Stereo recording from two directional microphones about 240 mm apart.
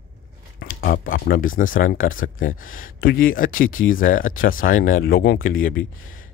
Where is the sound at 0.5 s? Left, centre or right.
Left.